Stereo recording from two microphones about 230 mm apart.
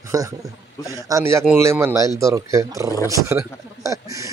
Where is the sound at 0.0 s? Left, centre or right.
Centre.